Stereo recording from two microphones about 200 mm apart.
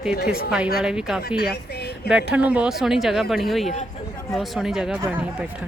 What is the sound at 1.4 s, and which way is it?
Speech, 55° left (ahead or behind).